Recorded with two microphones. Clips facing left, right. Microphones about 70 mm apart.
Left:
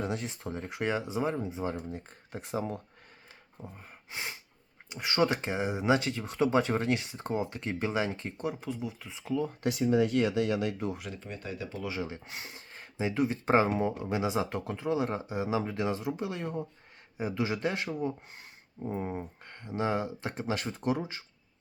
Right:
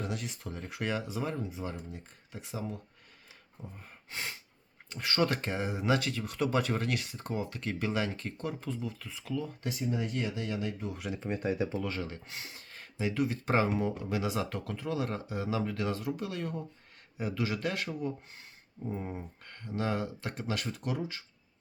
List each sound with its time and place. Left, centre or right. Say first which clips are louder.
0.0 s speech: left 3 dB; left
1.9 s speech: left 5 dB; left
3.6 s speech: left 2 dB; centre
9.6 s speech: left 10 dB; left
11.3 s speech: right 9 dB; right
11.8 s speech: left 1 dB; centre